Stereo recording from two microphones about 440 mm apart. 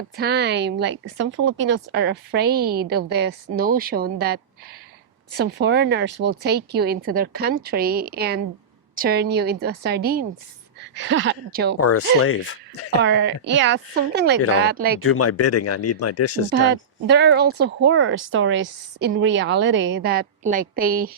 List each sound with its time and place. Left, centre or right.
0.2 s speech: right
5.4 s speech: right
11.8 s speech: left
13.0 s speech: right
15.0 s speech: left
16.5 s speech: right